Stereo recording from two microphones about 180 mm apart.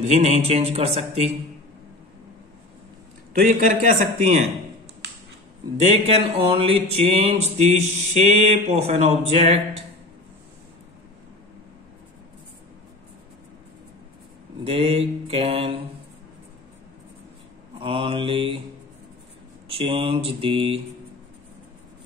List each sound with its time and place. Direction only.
0.1 s speech: 35° right (ahead or behind)
3.3 s speech: 45° right (ahead or behind)
5.8 s speech: 35° right (ahead or behind)
14.6 s speech: 30° right (ahead or behind)
17.7 s mantra: 30° right (ahead or behind)
19.7 s mantra: 30° right (ahead or behind)